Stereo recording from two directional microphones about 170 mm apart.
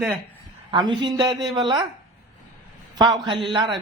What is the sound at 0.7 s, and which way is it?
Speech, 30° right (ahead or behind).